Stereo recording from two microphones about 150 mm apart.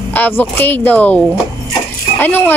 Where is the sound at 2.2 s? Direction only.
10° left (ahead or behind).